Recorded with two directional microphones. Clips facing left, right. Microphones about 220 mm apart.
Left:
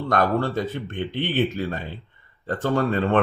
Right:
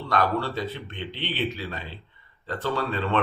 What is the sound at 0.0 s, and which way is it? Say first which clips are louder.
Speech: left 4 dB; 50° left (ahead or behind).